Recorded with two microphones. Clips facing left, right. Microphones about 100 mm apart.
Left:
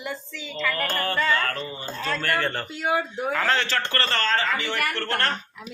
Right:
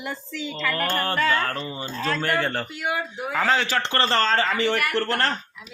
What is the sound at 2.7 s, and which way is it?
Speech, 30° left (ahead or behind).